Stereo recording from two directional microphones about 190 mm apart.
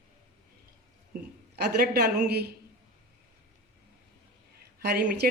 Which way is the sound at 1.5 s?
55° right (ahead or behind).